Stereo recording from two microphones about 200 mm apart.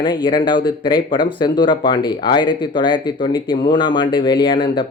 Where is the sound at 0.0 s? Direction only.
20° left (ahead or behind).